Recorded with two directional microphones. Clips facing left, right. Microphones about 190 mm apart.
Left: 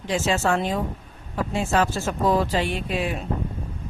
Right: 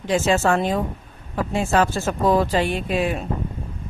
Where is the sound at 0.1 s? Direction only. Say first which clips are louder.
Right 4 dB; 50° right (ahead or behind).